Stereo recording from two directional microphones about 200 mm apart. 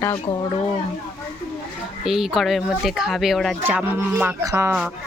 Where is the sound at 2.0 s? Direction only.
Centre (ahead or behind).